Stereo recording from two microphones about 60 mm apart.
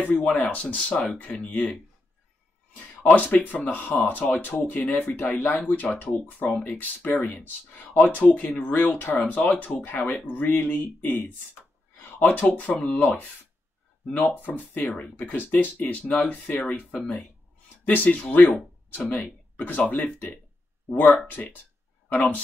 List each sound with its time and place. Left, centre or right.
0.1 s speech: centre
3.0 s speech: left
14.0 s speech: centre
14.3 s speech: left
17.8 s speech: left